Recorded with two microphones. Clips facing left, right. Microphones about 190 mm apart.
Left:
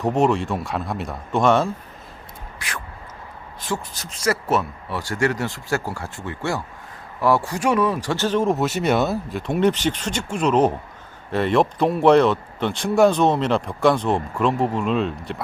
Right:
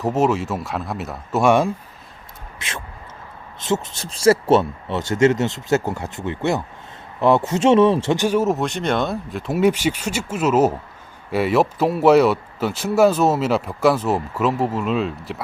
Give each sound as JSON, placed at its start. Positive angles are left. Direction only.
{"t": 0.0, "sound": "speech", "side_deg": 0}
{"t": 2.6, "sound": "speech", "side_deg": -25}
{"t": 8.1, "sound": "speech", "side_deg": -10}